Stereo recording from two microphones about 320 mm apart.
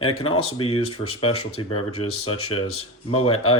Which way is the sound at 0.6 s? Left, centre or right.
Centre.